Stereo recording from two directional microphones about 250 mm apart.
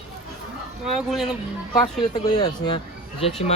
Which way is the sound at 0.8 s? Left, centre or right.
Centre.